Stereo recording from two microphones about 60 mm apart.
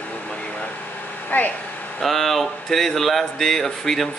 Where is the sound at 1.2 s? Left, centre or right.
Left.